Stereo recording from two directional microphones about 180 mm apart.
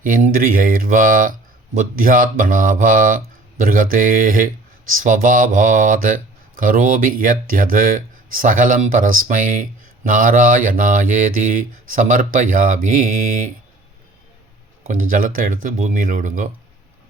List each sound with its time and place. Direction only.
0.0 s speech: 50° right (ahead or behind)
14.8 s speech: 50° right (ahead or behind)